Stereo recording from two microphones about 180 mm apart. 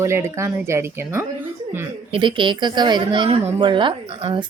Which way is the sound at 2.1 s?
25° right (ahead or behind).